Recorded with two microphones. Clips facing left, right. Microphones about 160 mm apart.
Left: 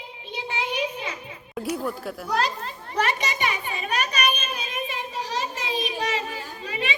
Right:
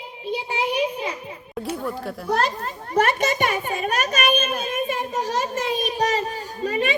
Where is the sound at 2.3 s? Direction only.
50° right (ahead or behind).